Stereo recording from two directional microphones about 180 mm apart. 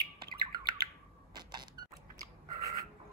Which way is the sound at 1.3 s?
25° right (ahead or behind).